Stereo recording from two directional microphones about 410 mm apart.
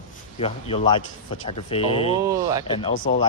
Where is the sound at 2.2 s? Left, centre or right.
Centre.